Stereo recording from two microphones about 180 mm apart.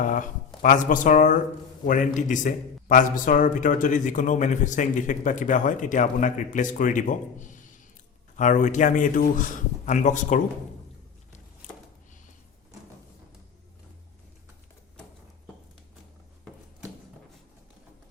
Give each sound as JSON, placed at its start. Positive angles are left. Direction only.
{"t": 0.0, "sound": "a man's voice", "side_deg": 45}